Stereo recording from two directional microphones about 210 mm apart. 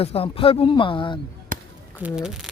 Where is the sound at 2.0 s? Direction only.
Centre (ahead or behind).